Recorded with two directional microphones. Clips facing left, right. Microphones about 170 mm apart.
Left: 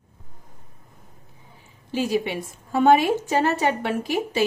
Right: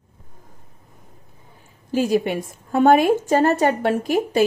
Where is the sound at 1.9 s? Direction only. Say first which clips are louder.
Right 4 dB; 50° right (ahead or behind).